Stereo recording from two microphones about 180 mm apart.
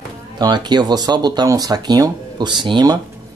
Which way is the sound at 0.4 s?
25° right (ahead or behind).